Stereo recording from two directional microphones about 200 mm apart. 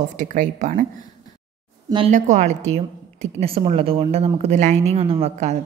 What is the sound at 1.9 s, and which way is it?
A woman's voice, 30° right (ahead or behind).